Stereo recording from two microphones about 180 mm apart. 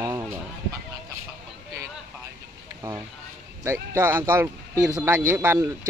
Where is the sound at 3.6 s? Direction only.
15° right (ahead or behind).